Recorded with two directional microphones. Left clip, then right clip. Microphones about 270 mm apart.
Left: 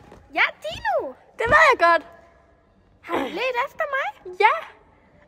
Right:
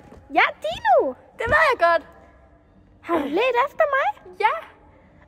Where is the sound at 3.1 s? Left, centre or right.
Left.